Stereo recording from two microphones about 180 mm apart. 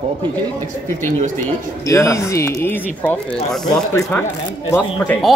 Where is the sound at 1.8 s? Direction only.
15° left (ahead or behind).